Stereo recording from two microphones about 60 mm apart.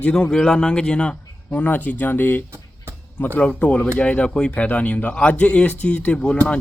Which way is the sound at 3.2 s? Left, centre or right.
Left.